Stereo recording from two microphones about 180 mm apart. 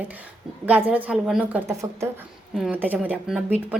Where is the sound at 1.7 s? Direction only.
15° right (ahead or behind).